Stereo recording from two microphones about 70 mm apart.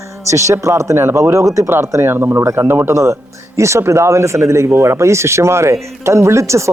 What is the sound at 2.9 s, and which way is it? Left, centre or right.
Speech, right.